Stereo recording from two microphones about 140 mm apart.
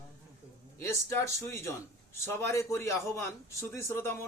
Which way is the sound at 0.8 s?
20° left (ahead or behind).